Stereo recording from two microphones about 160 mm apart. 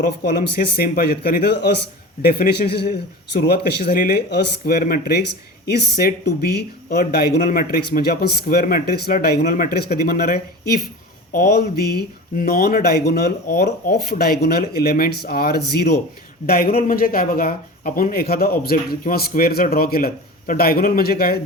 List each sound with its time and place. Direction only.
0.0 s speech: 65° left (ahead or behind)
5.6 s speech: 85° left
9.4 s a man's voice: 55° left (ahead or behind); by 10.2 s 80° left
11.3 s speech: 75° left (ahead or behind); by 16.0 s 90° left
16.5 s speech: 70° left (ahead or behind)